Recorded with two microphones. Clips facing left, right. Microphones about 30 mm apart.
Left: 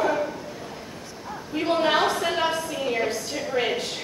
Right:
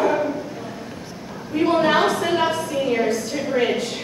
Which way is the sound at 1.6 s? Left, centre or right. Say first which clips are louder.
Right 4 dB; centre.